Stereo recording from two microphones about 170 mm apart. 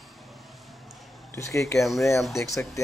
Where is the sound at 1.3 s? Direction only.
20° left (ahead or behind).